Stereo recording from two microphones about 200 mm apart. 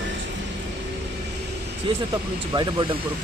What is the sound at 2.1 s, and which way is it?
Speech, 20° right (ahead or behind).